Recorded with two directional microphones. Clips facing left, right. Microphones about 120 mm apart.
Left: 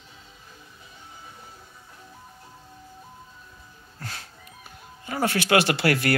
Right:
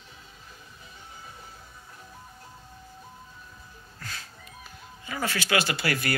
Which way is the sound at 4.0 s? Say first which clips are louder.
Left 3 dB; 60° left (ahead or behind).